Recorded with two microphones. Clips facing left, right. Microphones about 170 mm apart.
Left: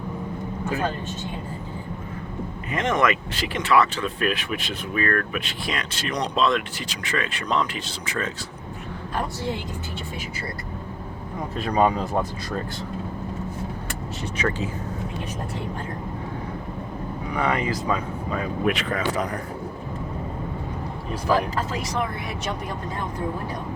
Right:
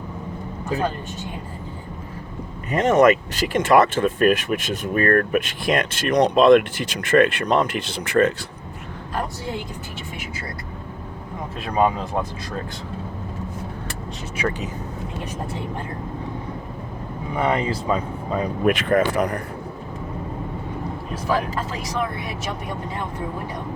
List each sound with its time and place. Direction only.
2.7 s speech: 40° right (ahead or behind); by 8.3 s 60° right (ahead or behind)
11.6 s speech: centre (ahead or behind)
14.3 s speech: 10° right (ahead or behind)
17.3 s speech: 25° right (ahead or behind)
18.6 s speech: 50° right (ahead or behind)